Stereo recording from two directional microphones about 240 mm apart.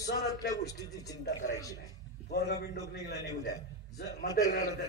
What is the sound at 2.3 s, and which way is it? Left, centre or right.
Speech, left.